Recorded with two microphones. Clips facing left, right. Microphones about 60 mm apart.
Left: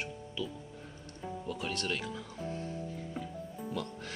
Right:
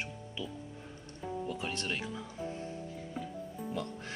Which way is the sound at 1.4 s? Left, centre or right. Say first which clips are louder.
Left 3 dB; right.